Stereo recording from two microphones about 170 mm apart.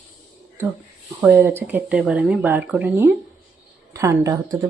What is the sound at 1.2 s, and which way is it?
Speech, 10° right (ahead or behind).